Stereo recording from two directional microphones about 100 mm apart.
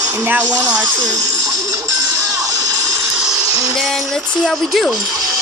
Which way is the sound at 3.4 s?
35° right (ahead or behind).